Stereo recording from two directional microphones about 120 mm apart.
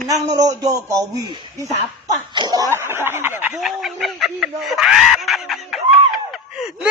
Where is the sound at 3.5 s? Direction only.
Centre (ahead or behind).